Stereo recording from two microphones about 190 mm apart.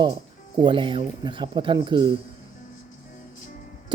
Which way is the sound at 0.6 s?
25° right (ahead or behind).